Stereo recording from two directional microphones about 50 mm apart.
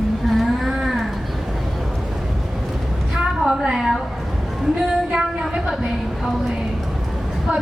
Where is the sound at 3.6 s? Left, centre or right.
Centre.